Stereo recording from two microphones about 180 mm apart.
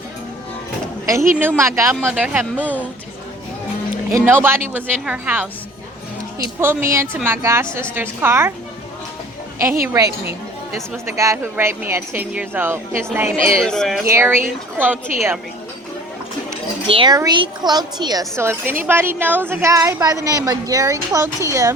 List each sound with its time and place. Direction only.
1.0 s a woman's voice: 15° right (ahead or behind)
4.1 s a woman's voice: 15° right (ahead or behind)
6.6 s a woman's voice: 15° right (ahead or behind)
9.8 s a woman's voice: 15° right (ahead or behind)
13.7 s speech: centre (ahead or behind)
14.0 s a woman's voice: 15° right (ahead or behind)
16.8 s a woman's voice: 30° right (ahead or behind)